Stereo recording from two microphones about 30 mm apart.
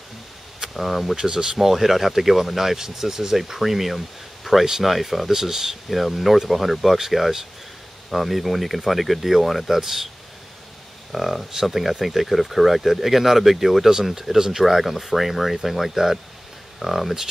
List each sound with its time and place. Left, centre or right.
0.7 s speech: centre
1.1 s speech: right
1.6 s speech: centre
4.5 s speech: centre
4.8 s speech: centre
5.3 s speech: centre
5.9 s speech: centre
11.1 s speech: centre
14.6 s speech: centre